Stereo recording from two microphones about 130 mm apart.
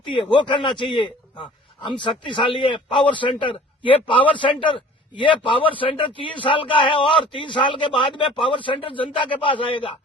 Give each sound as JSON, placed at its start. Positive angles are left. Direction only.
{"t": 0.1, "sound": "a man's voice", "side_deg": 40}